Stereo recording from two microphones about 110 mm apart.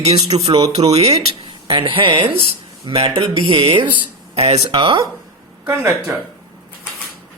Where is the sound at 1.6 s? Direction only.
55° right (ahead or behind).